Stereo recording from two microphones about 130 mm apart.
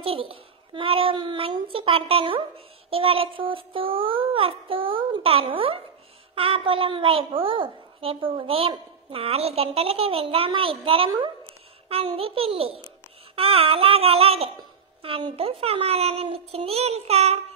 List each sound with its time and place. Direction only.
0.0 s a child's voice: 45° right (ahead or behind)